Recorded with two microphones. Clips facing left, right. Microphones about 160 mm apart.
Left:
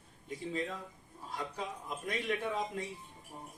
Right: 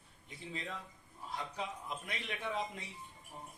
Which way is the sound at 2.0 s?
45° left (ahead or behind).